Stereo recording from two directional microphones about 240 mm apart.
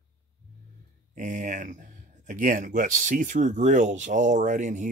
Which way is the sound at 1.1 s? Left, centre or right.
Right.